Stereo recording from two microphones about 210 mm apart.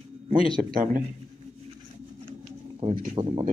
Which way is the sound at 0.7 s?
40° right (ahead or behind).